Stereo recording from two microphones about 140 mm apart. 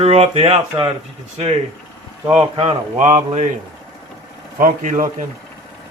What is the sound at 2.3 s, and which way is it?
Speech, 45° right (ahead or behind).